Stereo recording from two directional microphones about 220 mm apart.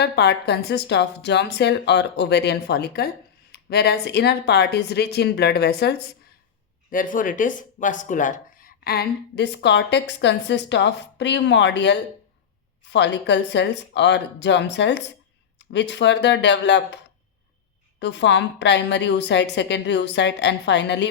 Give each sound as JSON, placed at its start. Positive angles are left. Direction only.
{"t": 0.0, "sound": "speech", "side_deg": 50}
{"t": 18.0, "sound": "speech", "side_deg": 50}